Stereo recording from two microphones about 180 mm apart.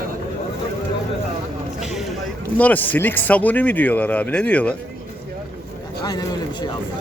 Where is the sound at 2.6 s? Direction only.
10° left (ahead or behind).